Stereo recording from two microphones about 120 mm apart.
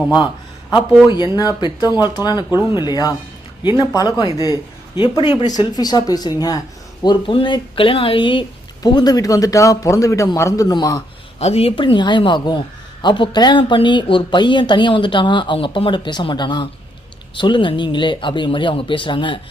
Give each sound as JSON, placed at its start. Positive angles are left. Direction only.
{"t": 1.0, "sound": "a woman's voice", "side_deg": 40}
{"t": 4.3, "sound": "speech", "side_deg": -25}
{"t": 5.0, "sound": "a woman's voice", "side_deg": 35}
{"t": 7.0, "sound": "a man's voice", "side_deg": 40}
{"t": 11.3, "sound": "speech", "side_deg": 60}
{"t": 11.8, "sound": "a woman's voice", "side_deg": 40}